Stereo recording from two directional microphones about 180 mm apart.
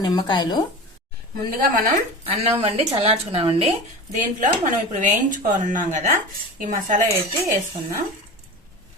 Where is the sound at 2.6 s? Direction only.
35° right (ahead or behind).